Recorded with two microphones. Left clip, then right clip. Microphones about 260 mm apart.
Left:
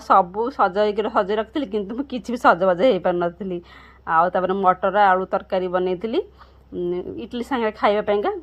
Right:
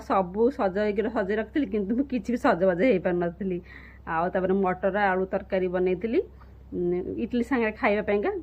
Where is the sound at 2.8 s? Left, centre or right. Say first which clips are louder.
Left 5 dB; left.